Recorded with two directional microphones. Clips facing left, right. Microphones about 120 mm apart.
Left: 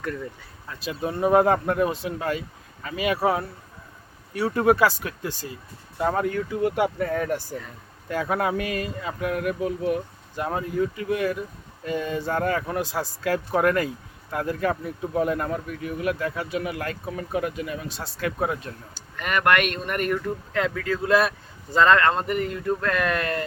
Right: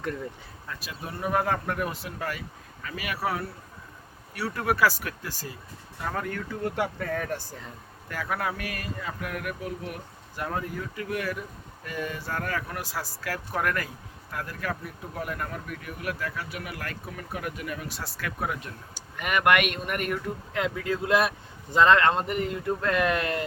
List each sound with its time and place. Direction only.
0.7 s speech: 25° left (ahead or behind)
19.1 s speech: 10° right (ahead or behind)